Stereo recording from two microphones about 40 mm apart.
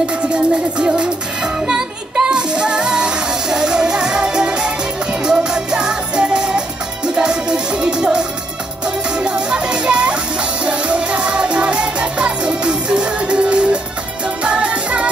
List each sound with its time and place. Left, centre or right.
0.0 s music: right